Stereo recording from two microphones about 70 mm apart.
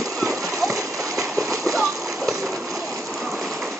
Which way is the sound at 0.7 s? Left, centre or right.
Right.